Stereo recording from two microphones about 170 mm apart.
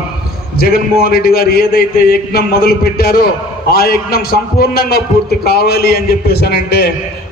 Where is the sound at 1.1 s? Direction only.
60° left (ahead or behind).